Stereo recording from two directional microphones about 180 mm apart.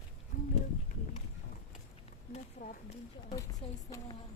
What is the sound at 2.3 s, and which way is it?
Speech, 45° left (ahead or behind).